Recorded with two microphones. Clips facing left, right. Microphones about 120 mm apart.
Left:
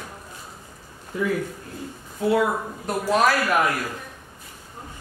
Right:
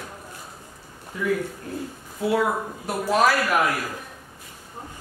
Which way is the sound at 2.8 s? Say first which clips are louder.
Even; centre (ahead or behind).